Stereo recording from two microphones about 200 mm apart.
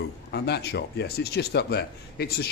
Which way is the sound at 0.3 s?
55° left (ahead or behind).